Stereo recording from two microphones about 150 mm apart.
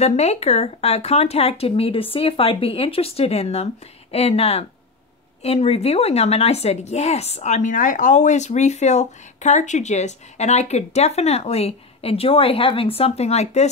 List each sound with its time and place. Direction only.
0.0 s a woman's voice: 45° left (ahead or behind)